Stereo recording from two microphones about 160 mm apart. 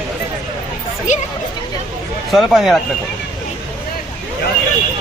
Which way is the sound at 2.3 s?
Centre (ahead or behind).